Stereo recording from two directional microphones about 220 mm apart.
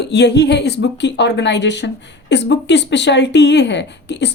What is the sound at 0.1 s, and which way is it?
Speech, 50° left (ahead or behind).